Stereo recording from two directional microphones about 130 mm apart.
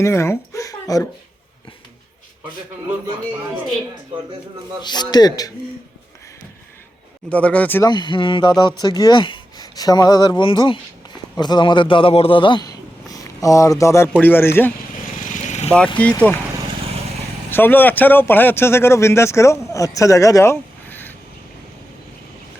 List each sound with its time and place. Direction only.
0.0 s speech: 20° left (ahead or behind)
4.8 s speech: 35° left (ahead or behind)
7.3 s speech: 10° left (ahead or behind)
7.9 s speech: 35° left (ahead or behind); by 14.7 s 15° left (ahead or behind)
15.2 s vehicle: 80° left; by 15.7 s 65° left (ahead or behind)
16.0 s speech: 10° left (ahead or behind)
17.5 s speech: 15° left (ahead or behind)